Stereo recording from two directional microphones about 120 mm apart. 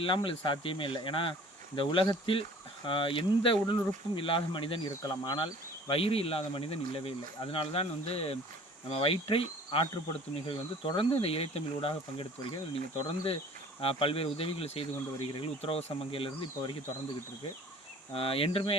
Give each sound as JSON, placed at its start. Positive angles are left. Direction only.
{"t": 0.0, "sound": "speech", "side_deg": 45}
{"t": 5.9, "sound": "speech", "side_deg": 55}
{"t": 18.1, "sound": "speech", "side_deg": 50}